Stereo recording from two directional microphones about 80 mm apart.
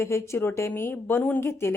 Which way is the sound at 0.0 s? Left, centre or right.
Left.